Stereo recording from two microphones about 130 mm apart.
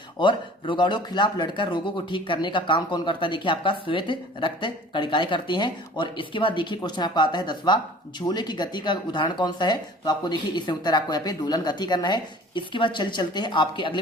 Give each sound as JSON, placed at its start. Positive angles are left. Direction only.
{"t": 0.2, "sound": "speech", "side_deg": 35}